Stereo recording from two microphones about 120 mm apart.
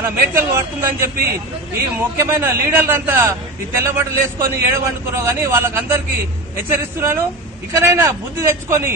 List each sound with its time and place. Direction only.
0.1 s a man's voice: 20° right (ahead or behind)
2.1 s a man's voice: 20° right (ahead or behind)